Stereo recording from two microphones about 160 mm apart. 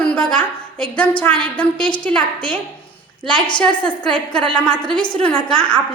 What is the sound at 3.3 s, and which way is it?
Speech, 30° left (ahead or behind).